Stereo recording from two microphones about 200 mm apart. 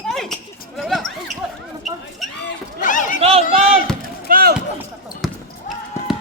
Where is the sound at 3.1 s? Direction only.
30° right (ahead or behind).